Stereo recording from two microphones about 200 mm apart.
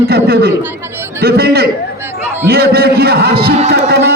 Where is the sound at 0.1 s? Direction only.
50° right (ahead or behind).